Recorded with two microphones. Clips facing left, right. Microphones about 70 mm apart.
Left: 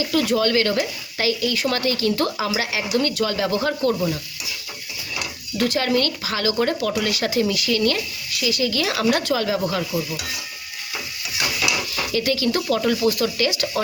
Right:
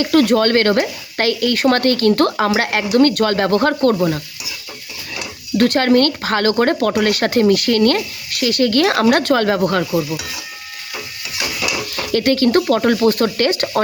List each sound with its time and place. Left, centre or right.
0.0 s speech: right
5.5 s speech: right
11.9 s speech: right